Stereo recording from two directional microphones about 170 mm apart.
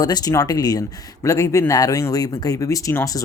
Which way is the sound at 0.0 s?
20° left (ahead or behind).